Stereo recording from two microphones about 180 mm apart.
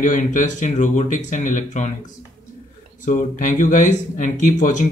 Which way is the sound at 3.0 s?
45° left (ahead or behind).